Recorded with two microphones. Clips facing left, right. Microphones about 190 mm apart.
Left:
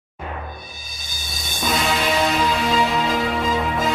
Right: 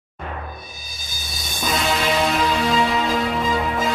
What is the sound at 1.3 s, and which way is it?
Music, centre (ahead or behind).